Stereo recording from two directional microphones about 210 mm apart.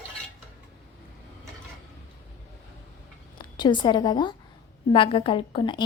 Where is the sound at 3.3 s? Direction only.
20° left (ahead or behind).